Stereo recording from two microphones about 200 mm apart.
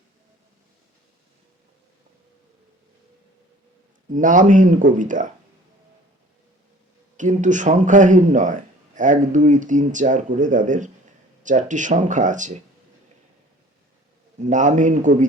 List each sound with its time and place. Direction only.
4.1 s speech: 40° right (ahead or behind)
7.2 s speech: 40° right (ahead or behind)
14.3 s speech: 40° right (ahead or behind)